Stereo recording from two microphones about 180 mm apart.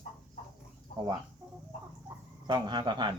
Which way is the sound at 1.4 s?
15° right (ahead or behind).